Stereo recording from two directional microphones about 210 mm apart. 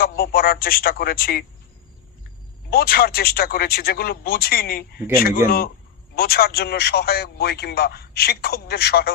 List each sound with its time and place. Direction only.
0.0 s a man's voice: 45° left (ahead or behind)
2.6 s a man's voice: 45° left (ahead or behind)